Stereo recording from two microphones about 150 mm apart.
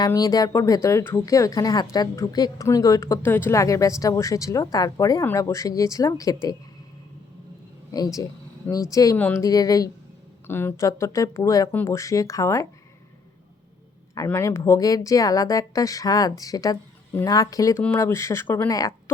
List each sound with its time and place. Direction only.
0.0 s a woman's voice: 25° left (ahead or behind)
7.9 s a woman's voice: 25° left (ahead or behind)
9.1 s speech: 10° left (ahead or behind)
9.4 s a woman's voice: 25° left (ahead or behind)
14.3 s a woman's voice: 15° left (ahead or behind)